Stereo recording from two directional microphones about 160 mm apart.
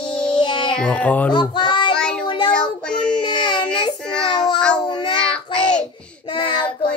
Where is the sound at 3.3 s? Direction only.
30° left (ahead or behind).